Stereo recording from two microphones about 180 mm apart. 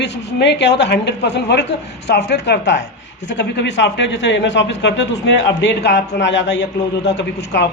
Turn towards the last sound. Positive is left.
turn(degrees=70)  # may be behind; listen again after turning